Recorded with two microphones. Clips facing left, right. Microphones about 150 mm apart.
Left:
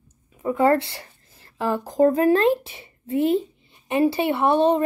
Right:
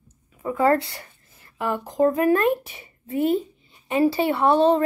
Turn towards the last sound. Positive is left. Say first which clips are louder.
# right 1 dB
turn(degrees=20)  # may be behind; listen again after turning